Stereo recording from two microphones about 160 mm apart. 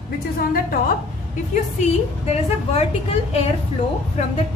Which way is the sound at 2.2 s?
40° left (ahead or behind).